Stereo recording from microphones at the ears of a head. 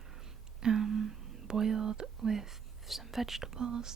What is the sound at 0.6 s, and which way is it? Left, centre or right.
Whispering, right.